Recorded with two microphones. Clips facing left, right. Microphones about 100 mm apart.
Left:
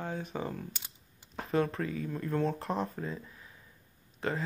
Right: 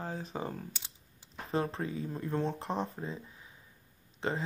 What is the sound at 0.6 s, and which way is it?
Coin, 50° left (ahead or behind).